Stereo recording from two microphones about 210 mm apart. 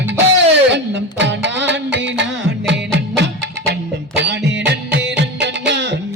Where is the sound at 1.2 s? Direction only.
55° right (ahead or behind).